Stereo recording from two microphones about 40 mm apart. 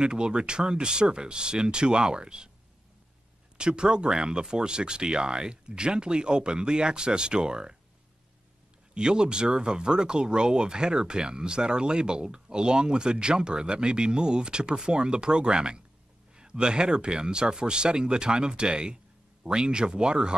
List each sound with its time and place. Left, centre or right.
0.0 s speech: right
3.5 s speech: right
8.9 s speech: right